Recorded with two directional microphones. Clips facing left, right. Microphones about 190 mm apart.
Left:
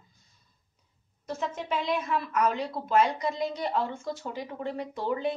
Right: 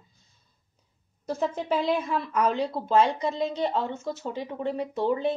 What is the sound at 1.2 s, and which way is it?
Speech, 35° right (ahead or behind).